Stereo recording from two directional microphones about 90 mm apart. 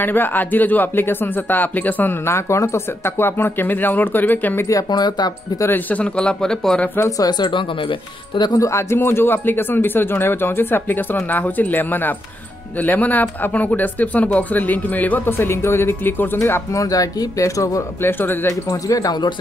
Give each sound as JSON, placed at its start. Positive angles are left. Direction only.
{"t": 0.0, "sound": "speech", "side_deg": 20}
{"t": 4.9, "sound": "speech", "side_deg": 50}
{"t": 5.6, "sound": "speech", "side_deg": 20}
{"t": 7.0, "sound": "speech", "side_deg": 40}
{"t": 8.4, "sound": "speech", "side_deg": 45}
{"t": 8.6, "sound": "speech", "side_deg": 30}
{"t": 16.8, "sound": "speech", "side_deg": 40}
{"t": 18.0, "sound": "speech", "side_deg": 25}
{"t": 18.7, "sound": "speech", "side_deg": 40}